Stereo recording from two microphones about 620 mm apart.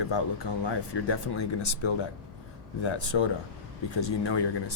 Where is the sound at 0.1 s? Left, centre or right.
Left.